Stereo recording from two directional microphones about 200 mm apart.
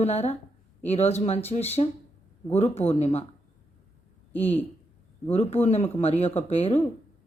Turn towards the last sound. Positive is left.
turn(degrees=30)  # may be behind; listen again after turning